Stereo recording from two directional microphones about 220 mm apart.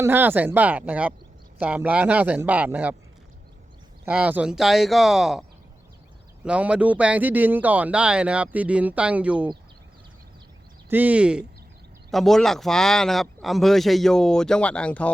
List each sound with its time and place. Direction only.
0.0 s speech: 10° right (ahead or behind)
4.0 s speech: 5° right (ahead or behind)
10.8 s speech: 10° right (ahead or behind)